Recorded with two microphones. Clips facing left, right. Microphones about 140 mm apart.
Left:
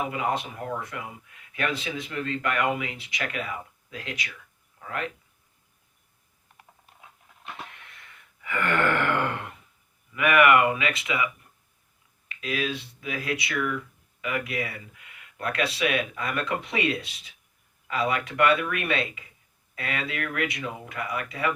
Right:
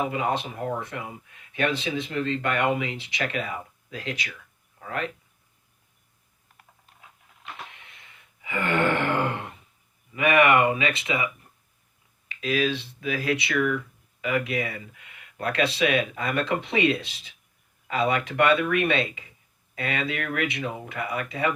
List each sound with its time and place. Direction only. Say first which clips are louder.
0.0 s speech: right 2 dB; 25° right (ahead or behind)
7.9 s gasp: left 2 dB; 25° right (ahead or behind)
10.1 s speech: even; 25° right (ahead or behind)
12.4 s speech: right 5 dB; 25° right (ahead or behind)